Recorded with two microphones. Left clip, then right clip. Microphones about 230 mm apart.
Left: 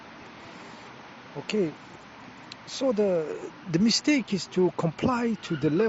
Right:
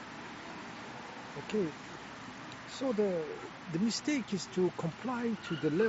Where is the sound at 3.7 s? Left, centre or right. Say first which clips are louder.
Left 10 dB; left.